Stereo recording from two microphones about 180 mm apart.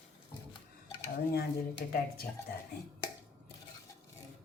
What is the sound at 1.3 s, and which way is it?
Speech, 60° left (ahead or behind).